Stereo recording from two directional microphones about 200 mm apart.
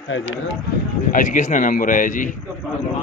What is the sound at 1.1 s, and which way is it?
Speech, 40° left (ahead or behind).